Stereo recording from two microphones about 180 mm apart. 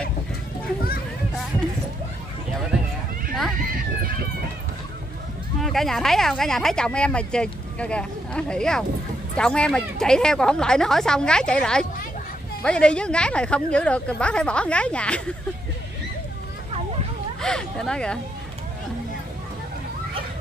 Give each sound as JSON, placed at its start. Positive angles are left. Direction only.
{"t": 3.7, "sound": "a sound", "side_deg": -55}
{"t": 5.6, "sound": "speech", "side_deg": 0}
{"t": 17.4, "sound": "speech", "side_deg": 5}